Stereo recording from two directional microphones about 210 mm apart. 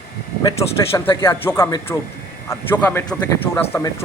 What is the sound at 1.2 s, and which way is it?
Speech, 10° left (ahead or behind).